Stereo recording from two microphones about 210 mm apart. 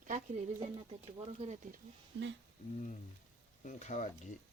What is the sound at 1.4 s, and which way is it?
Speech, 35° right (ahead or behind).